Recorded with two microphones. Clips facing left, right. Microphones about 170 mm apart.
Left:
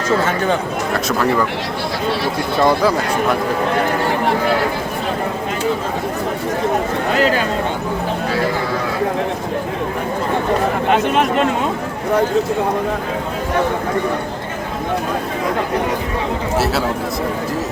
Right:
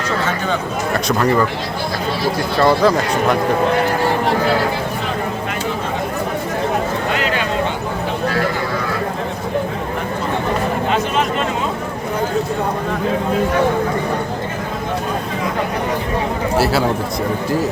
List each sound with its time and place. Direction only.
0.9 s speech: 5° left (ahead or behind)
2.6 s speech: 15° left (ahead or behind)
7.2 s a sound: 40° left (ahead or behind)
16.6 s speech: centre (ahead or behind)